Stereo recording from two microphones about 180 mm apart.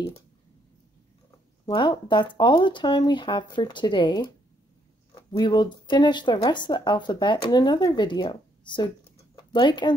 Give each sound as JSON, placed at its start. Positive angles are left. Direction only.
{"t": 1.7, "sound": "speech", "side_deg": 25}